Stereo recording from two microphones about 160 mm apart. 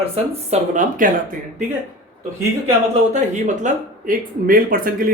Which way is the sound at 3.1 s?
50° right (ahead or behind).